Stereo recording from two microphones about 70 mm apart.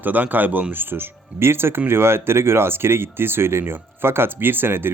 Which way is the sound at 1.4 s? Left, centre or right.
Right.